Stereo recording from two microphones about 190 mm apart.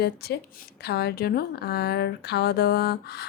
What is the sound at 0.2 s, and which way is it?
A woman's voice, 60° left (ahead or behind).